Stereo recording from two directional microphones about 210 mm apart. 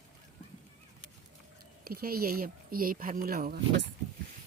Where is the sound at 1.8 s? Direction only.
45° right (ahead or behind).